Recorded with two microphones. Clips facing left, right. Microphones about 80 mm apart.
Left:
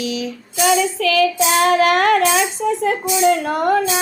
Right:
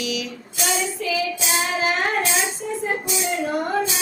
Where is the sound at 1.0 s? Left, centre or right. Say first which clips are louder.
Left 9 dB; left.